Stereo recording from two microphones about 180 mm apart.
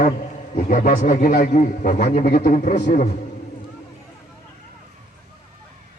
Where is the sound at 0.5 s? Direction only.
50° left (ahead or behind).